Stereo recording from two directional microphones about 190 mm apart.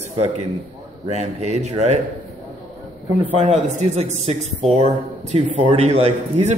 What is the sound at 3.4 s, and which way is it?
Speech, 35° right (ahead or behind).